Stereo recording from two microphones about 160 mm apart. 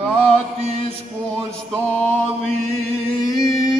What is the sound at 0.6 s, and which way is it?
Music, 40° right (ahead or behind).